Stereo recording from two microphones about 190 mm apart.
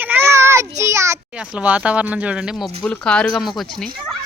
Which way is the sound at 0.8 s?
15° right (ahead or behind).